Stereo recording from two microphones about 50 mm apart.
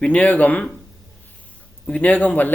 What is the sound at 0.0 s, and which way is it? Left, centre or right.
Speech, left.